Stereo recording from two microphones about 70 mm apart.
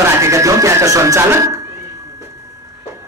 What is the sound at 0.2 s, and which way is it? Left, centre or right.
Music, right.